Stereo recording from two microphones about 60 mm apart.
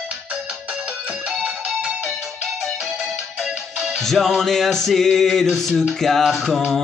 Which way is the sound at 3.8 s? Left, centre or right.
Centre.